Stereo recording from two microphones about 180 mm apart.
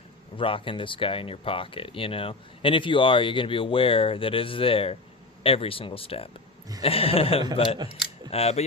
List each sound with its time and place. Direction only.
0.3 s speech: 30° left (ahead or behind)